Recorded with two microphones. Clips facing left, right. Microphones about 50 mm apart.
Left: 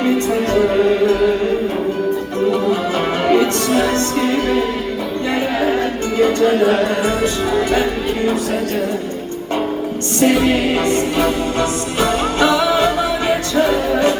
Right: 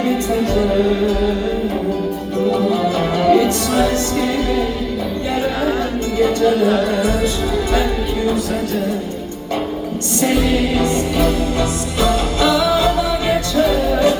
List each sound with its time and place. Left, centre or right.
0.5 s music: left
2.8 s music: left
6.5 s music: left
10.2 s music: left